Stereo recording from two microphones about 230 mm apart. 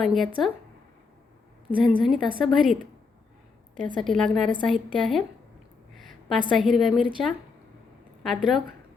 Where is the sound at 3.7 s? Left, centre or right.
Right.